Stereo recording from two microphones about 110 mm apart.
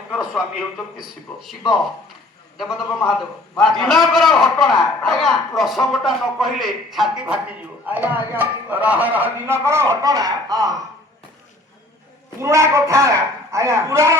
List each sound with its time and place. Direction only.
0.1 s a man's voice: 5° right (ahead or behind)
2.6 s a man's voice: centre (ahead or behind)
7.9 s speech: 15° right (ahead or behind); by 10.7 s 35° right (ahead or behind)
12.4 s a man's voice: 25° right (ahead or behind)